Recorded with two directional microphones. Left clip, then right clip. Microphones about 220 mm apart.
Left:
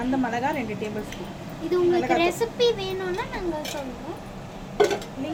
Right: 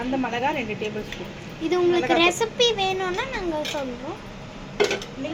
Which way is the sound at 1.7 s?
10° right (ahead or behind).